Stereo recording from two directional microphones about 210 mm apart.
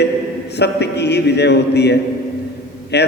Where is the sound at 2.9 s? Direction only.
50° left (ahead or behind).